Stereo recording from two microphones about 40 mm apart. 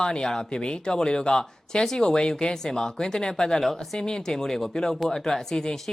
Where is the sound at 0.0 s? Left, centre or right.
Centre.